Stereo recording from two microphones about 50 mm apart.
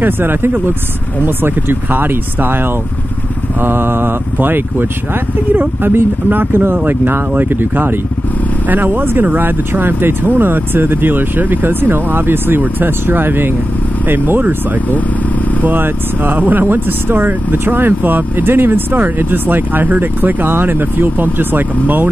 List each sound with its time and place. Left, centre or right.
0.0 s speech: right
15.6 s speech: right